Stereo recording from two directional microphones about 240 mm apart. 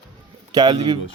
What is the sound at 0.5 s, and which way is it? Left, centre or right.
Speech, centre.